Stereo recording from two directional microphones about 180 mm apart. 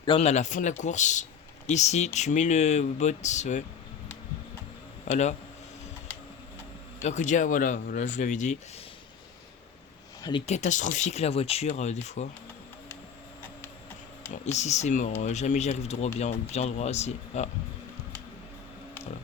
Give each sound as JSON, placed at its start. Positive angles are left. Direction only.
{"t": 0.0, "sound": "speech", "side_deg": 30}
{"t": 7.0, "sound": "speech", "side_deg": 40}
{"t": 10.4, "sound": "speech", "side_deg": 40}
{"t": 14.6, "sound": "speech", "side_deg": 40}